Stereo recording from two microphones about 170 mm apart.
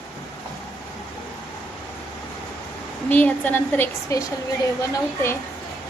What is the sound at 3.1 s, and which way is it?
A woman's voice, 10° left (ahead or behind).